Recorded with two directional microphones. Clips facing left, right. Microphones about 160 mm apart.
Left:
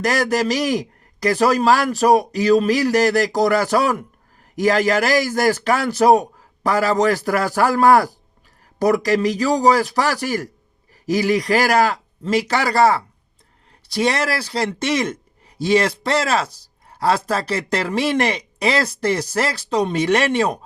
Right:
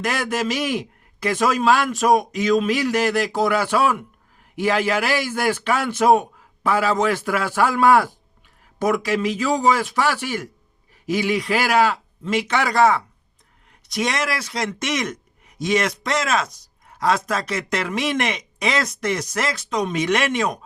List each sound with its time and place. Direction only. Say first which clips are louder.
0.0 s speech: left 4 dB; 40° left (ahead or behind)